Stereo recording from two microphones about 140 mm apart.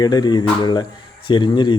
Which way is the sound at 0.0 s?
30° left (ahead or behind).